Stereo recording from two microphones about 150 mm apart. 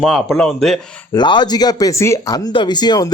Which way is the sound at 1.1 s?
30° left (ahead or behind).